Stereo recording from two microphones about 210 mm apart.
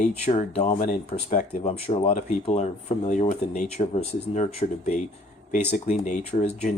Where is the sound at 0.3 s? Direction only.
30° left (ahead or behind).